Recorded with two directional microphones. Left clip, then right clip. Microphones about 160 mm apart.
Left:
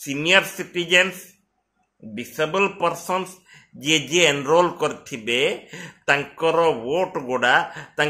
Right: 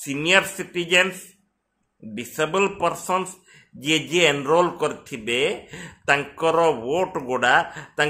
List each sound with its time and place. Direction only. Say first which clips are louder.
0.0 s speech: left 1 dB; centre (ahead or behind)